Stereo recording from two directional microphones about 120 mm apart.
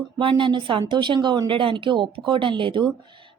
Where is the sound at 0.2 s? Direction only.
45° right (ahead or behind).